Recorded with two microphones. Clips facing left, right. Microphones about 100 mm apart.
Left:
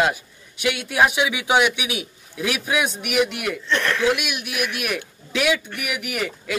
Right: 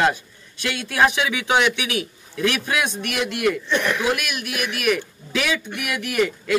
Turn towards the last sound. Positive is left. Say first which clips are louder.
# right 5 dB
turn(degrees=5)  # may be behind; listen again after turning